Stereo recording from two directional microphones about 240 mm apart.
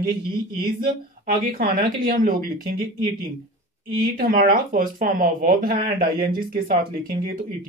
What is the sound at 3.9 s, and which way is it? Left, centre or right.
Speech, right.